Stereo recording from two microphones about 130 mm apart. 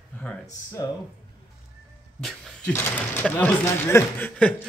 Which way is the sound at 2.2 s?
Centre (ahead or behind).